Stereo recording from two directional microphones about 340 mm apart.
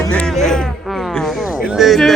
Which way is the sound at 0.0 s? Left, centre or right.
Centre.